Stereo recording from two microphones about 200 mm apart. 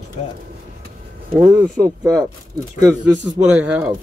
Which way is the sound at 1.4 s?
15° right (ahead or behind).